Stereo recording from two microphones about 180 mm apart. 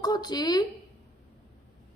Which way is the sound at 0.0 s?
20° left (ahead or behind).